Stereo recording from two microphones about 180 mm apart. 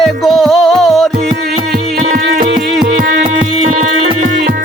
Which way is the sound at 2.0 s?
45° right (ahead or behind).